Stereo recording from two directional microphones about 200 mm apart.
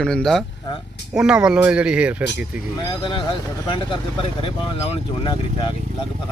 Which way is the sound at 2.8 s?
20° left (ahead or behind).